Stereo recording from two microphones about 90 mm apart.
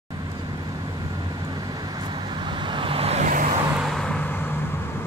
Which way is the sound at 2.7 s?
75° right (ahead or behind).